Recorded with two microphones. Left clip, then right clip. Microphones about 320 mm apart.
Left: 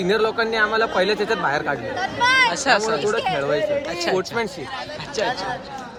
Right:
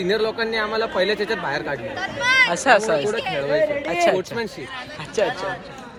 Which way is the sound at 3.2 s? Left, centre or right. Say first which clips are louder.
Left 2 dB; left.